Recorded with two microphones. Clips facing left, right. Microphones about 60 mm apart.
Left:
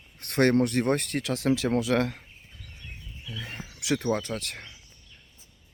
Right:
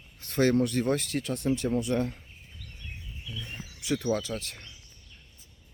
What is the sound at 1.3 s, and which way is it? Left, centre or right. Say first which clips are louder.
Speech: left 3 dB; left.